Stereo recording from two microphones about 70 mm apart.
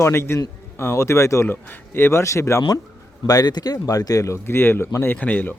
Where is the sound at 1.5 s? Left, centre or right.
Left.